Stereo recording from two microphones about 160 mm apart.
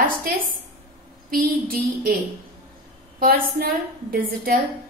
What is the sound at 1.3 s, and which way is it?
Speech, 65° right (ahead or behind).